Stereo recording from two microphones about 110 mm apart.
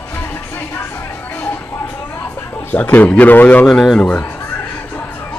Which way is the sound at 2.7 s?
15° left (ahead or behind).